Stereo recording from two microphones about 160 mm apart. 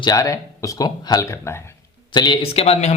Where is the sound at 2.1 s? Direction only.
30° left (ahead or behind).